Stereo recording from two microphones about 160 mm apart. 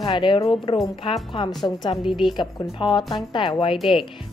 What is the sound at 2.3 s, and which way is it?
A woman's voice, 30° left (ahead or behind).